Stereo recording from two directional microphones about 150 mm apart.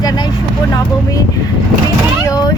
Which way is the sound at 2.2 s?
25° left (ahead or behind).